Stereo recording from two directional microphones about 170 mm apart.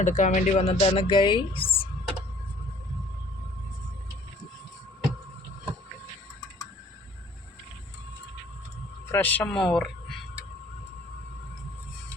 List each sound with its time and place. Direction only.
0.0 s speech: 45° left (ahead or behind)
9.1 s speech: 10° left (ahead or behind)